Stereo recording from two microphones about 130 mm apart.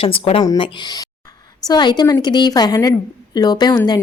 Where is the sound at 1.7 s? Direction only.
35° left (ahead or behind).